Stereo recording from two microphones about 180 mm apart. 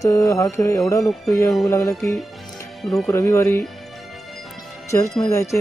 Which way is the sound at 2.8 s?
Centre (ahead or behind).